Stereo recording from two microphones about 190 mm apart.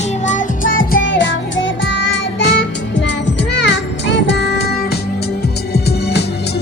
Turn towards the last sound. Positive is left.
turn(degrees=60)  # may be behind; listen again after turning